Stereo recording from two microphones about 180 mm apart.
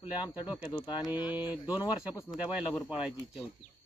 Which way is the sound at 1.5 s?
10° right (ahead or behind).